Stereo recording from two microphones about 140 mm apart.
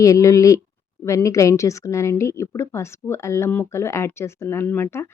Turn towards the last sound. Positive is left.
turn(degrees=15)  # may be behind; listen again after turning